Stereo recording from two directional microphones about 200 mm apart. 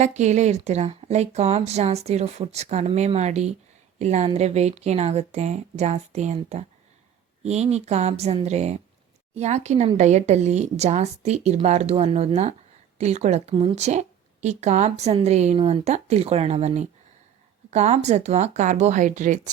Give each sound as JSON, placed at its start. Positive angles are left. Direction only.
{"t": 0.0, "sound": "a woman's voice", "side_deg": -35}